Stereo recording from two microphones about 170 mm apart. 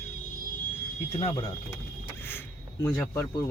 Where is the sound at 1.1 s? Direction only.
35° left (ahead or behind).